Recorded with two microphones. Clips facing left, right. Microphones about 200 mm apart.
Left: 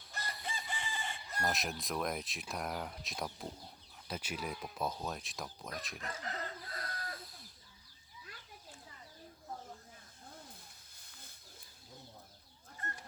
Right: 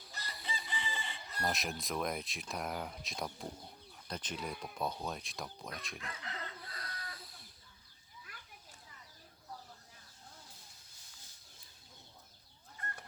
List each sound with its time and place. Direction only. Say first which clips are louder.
0.1 s chicken: left 2 dB; 50° left (ahead or behind)
1.4 s speech: even; centre (ahead or behind)
6.0 s chicken: left 4 dB; 45° left (ahead or behind)
10.9 s wild animals: left 4 dB; 55° left (ahead or behind)